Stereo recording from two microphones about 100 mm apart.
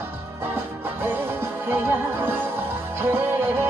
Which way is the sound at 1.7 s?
20° right (ahead or behind).